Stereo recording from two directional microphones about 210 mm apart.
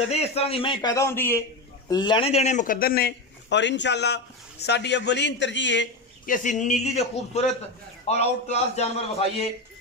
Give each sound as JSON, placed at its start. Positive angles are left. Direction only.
{"t": 0.1, "sound": "a man's voice", "side_deg": 30}
{"t": 6.2, "sound": "a man's voice", "side_deg": 40}